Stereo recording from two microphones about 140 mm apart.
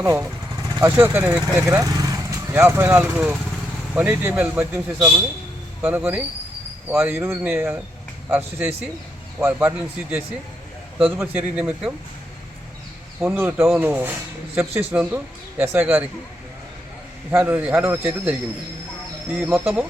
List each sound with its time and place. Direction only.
0.0 s a man's voice: 20° right (ahead or behind)
1.8 s a man's voice: 25° right (ahead or behind); by 11.9 s 5° right (ahead or behind)
13.1 s a man's voice: 15° right (ahead or behind)
17.3 s a man's voice: 10° right (ahead or behind)